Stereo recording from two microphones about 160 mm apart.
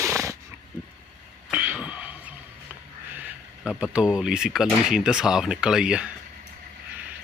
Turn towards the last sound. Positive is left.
turn(degrees=-5)  # may be behind; listen again after turning